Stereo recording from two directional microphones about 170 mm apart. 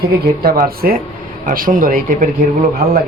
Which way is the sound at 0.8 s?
55° right (ahead or behind).